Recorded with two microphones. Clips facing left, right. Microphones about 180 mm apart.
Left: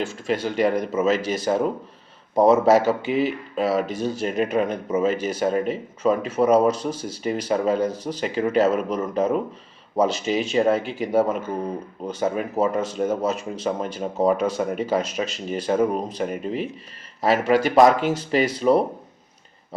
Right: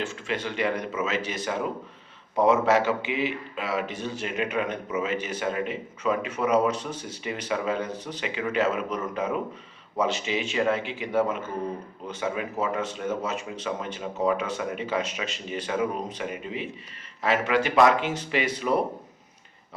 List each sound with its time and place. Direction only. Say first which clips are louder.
0.3 s speech: left 7 dB; 40° left (ahead or behind)